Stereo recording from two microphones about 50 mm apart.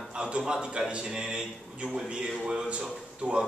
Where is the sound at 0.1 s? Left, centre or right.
Centre.